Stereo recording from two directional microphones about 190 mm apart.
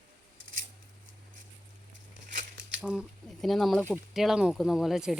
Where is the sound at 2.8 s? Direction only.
5° right (ahead or behind).